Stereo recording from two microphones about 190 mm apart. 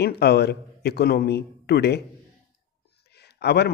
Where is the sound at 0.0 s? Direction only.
60° left (ahead or behind).